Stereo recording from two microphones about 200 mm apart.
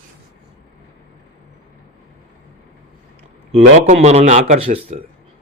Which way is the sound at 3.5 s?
35° right (ahead or behind).